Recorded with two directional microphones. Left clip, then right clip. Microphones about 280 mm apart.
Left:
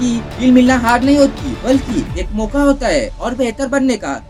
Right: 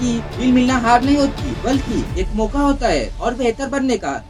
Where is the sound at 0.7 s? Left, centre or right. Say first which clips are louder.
Left 2 dB; left.